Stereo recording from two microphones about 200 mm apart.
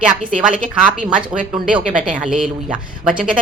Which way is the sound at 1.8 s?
40° right (ahead or behind).